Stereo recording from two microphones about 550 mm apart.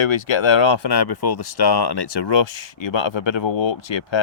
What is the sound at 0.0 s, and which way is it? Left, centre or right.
Speech, left.